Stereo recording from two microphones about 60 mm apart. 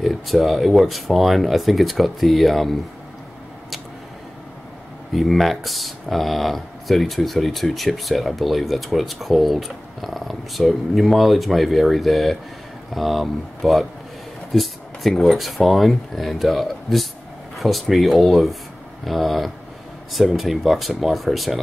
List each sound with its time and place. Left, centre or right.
0.0 s speech: centre
5.1 s speech: centre